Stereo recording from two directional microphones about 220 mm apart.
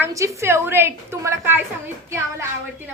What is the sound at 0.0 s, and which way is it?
A woman's voice, 10° right (ahead or behind).